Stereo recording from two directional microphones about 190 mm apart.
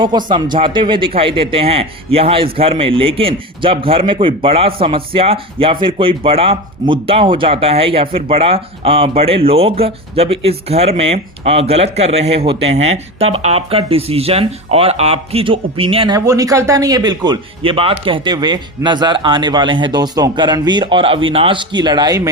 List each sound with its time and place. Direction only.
0.0 s a man's voice: 25° right (ahead or behind)
16.1 s a man's voice: 15° right (ahead or behind)